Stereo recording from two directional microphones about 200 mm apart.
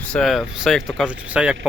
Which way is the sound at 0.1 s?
Centre (ahead or behind).